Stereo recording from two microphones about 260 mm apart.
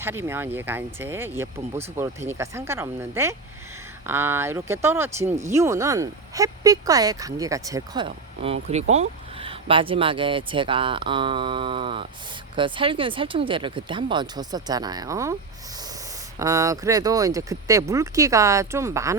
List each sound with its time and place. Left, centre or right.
0.0 s speech: centre
16.4 s speech: centre